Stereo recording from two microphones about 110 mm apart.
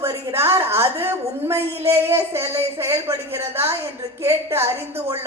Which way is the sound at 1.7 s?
65° right (ahead or behind).